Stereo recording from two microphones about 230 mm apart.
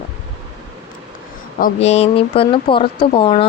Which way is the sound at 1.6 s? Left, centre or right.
Left.